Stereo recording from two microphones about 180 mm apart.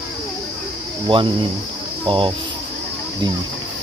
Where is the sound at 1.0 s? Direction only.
30° right (ahead or behind).